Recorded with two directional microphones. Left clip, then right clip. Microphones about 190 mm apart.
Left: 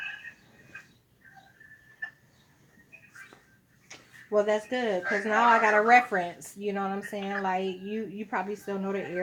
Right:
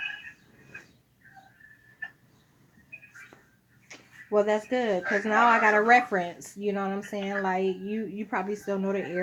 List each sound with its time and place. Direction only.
3.8 s speech: 25° right (ahead or behind)